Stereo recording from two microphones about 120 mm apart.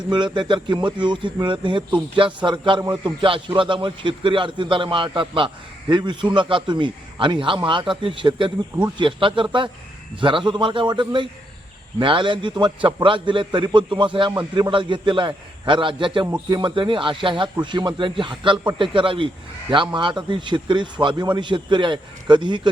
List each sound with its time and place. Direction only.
0.1 s a man's voice: 40° right (ahead or behind)